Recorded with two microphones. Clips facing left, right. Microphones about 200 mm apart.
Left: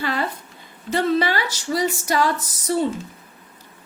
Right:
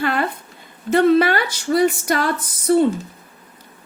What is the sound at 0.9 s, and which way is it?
A woman's voice, 55° right (ahead or behind).